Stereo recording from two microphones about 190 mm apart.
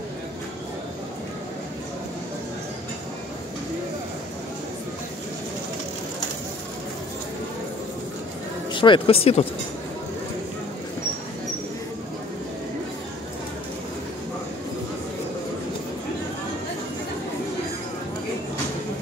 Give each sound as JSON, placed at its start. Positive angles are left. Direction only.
{"t": 8.7, "sound": "speech", "side_deg": 25}